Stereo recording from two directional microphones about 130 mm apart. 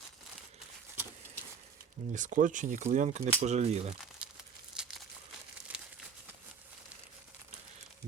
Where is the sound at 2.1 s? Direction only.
75° right (ahead or behind).